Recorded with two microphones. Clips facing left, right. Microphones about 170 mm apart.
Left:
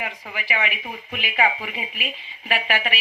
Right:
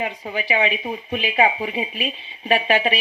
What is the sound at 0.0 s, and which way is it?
A woman's voice, 25° right (ahead or behind).